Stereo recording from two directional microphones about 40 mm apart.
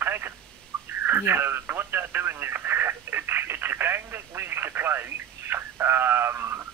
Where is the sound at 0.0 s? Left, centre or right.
Right.